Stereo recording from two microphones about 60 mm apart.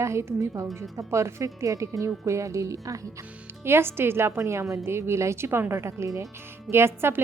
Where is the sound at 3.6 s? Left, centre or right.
Right.